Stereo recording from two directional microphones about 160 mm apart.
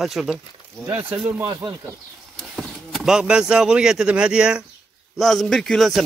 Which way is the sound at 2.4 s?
Centre (ahead or behind).